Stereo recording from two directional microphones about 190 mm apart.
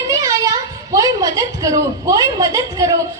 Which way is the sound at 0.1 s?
15° right (ahead or behind).